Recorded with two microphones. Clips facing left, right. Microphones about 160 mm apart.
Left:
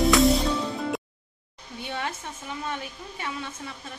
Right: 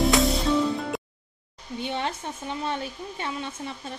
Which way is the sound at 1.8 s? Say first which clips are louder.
Right 3 dB; 25° right (ahead or behind).